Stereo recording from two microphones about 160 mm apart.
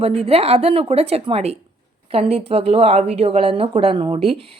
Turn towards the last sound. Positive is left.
turn(degrees=-35)  # may be behind; listen again after turning